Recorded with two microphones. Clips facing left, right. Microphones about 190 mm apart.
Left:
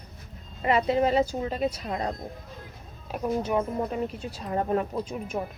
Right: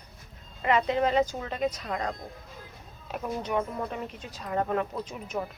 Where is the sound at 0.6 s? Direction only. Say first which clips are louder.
Left 2 dB; 35° left (ahead or behind).